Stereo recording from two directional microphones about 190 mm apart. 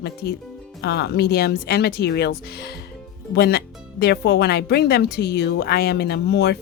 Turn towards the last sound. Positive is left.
turn(degrees=60)  # may be behind; listen again after turning